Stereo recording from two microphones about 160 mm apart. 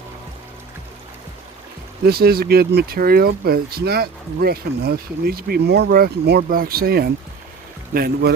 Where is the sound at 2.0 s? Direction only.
75° right (ahead or behind).